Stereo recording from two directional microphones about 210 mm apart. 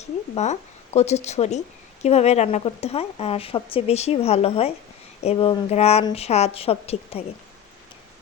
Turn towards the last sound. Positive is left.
turn(degrees=30)  # may be behind; listen again after turning